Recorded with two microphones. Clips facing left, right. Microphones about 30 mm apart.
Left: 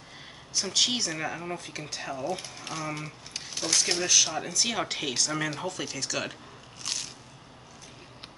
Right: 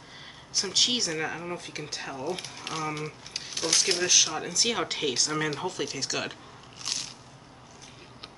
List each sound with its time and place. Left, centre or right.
0.6 s speech: centre
2.2 s speech: centre
6.8 s biting: centre